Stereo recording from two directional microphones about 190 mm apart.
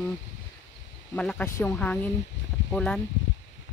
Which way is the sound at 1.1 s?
5° left (ahead or behind).